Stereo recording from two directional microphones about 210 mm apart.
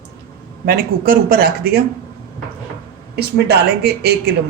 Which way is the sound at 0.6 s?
45° right (ahead or behind).